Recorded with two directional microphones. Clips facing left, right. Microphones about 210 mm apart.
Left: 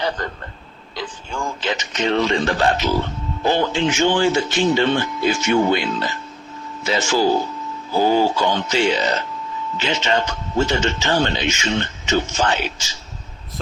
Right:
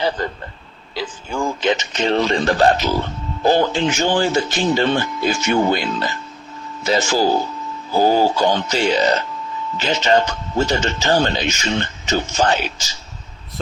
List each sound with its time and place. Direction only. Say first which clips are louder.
1.6 s a man's voice: right 2 dB; 25° right (ahead or behind)